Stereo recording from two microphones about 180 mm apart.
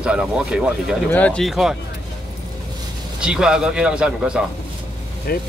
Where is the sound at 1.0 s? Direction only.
5° left (ahead or behind).